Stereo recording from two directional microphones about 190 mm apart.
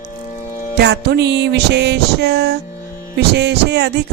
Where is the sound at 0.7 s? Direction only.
60° right (ahead or behind).